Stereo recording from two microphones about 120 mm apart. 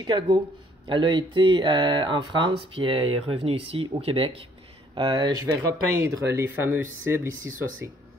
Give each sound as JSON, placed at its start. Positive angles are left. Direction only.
{"t": 0.0, "sound": "speech", "side_deg": -35}
{"t": 4.9, "sound": "speech", "side_deg": -40}
{"t": 5.9, "sound": "speech", "side_deg": -20}